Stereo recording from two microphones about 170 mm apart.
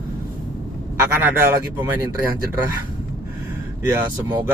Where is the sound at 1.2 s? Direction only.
10° right (ahead or behind).